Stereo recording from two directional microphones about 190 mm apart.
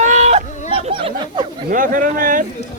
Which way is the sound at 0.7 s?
30° right (ahead or behind).